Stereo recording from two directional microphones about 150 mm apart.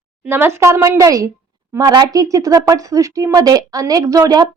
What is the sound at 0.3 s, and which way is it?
A woman's voice, 15° right (ahead or behind).